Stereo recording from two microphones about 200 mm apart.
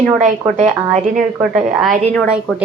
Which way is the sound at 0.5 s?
35° right (ahead or behind).